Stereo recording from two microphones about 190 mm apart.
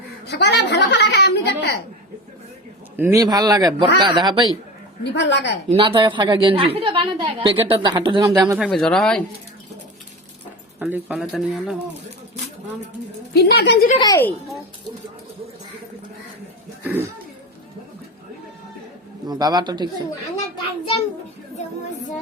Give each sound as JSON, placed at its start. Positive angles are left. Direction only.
{"t": 0.3, "sound": "a woman's voice", "side_deg": 60}
{"t": 2.9, "sound": "a woman's voice", "side_deg": -10}
{"t": 5.1, "sound": "a woman's voice", "side_deg": 65}
{"t": 5.7, "sound": "a woman's voice", "side_deg": -25}
{"t": 8.5, "sound": "speech", "side_deg": 0}
{"t": 10.8, "sound": "speech", "side_deg": -10}
{"t": 13.3, "sound": "a woman's voice", "side_deg": 55}
{"t": 14.0, "sound": "speech", "side_deg": 15}
{"t": 16.8, "sound": "speech", "side_deg": -10}
{"t": 19.3, "sound": "a woman's voice", "side_deg": -20}